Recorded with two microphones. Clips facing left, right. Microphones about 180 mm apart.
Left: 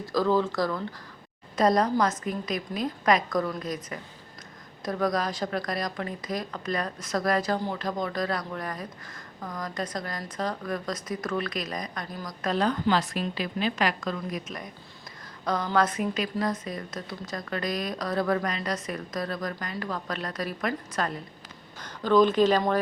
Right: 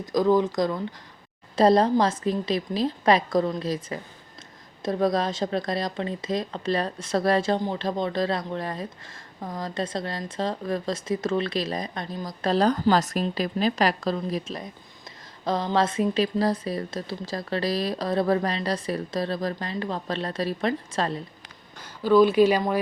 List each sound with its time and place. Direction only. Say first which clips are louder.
0.0 s speech: right 3 dB; 15° right (ahead or behind)
1.5 s a woman's voice: right 4 dB; 30° right (ahead or behind)
21.8 s speech: right 3 dB; 10° right (ahead or behind)